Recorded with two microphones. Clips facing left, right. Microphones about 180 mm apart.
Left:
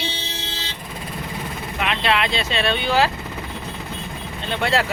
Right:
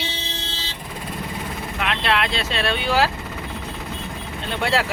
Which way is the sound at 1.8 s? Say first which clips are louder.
Left 1 dB; centre (ahead or behind).